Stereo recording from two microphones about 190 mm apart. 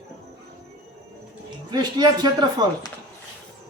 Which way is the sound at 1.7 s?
20° right (ahead or behind).